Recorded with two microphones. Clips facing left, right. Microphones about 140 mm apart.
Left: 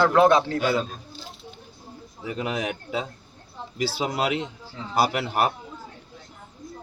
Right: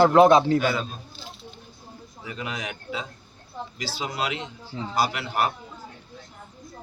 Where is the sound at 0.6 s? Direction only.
30° left (ahead or behind).